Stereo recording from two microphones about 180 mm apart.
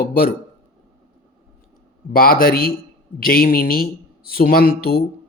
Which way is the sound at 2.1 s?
55° left (ahead or behind).